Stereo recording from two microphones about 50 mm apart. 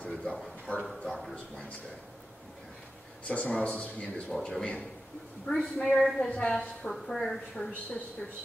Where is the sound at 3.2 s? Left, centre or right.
Left.